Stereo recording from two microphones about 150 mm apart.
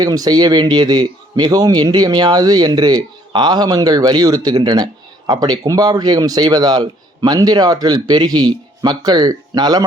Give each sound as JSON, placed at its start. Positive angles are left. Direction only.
{"t": 0.0, "sound": "a man's voice", "side_deg": -25}